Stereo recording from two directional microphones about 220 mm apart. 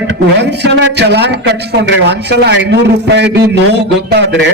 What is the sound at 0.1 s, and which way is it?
A man's voice, 50° right (ahead or behind).